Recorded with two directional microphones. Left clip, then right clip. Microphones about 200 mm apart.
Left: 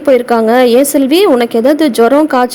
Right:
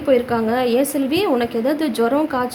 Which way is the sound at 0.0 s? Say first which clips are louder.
Left 9 dB; 40° left (ahead or behind).